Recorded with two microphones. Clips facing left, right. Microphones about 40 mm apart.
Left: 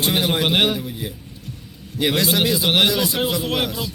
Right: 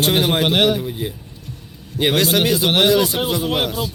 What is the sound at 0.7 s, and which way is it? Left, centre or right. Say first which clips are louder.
Speech: right 4 dB; right.